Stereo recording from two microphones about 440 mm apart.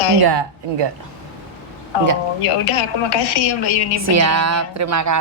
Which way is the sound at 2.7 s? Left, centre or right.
Left.